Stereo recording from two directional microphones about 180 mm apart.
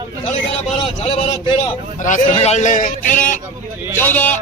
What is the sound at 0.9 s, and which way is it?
A man's voice, 30° left (ahead or behind).